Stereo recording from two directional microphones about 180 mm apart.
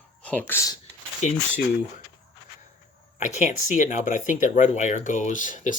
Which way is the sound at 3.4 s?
45° left (ahead or behind).